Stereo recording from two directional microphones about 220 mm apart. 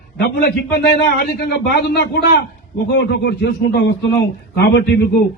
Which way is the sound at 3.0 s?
50° left (ahead or behind).